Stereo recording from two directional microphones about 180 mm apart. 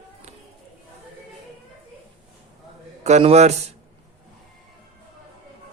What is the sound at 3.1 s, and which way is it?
Speech, 35° right (ahead or behind).